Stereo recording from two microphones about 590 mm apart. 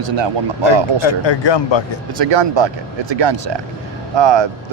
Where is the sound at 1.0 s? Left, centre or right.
Left.